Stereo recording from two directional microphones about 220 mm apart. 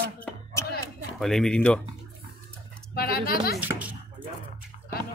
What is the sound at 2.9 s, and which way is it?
Speech, 45° left (ahead or behind).